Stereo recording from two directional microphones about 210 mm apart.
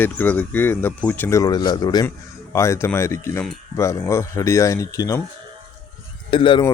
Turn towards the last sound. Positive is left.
turn(degrees=25)  # may be behind; listen again after turning